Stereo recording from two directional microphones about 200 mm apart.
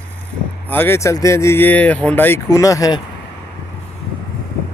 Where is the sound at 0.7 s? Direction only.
10° left (ahead or behind).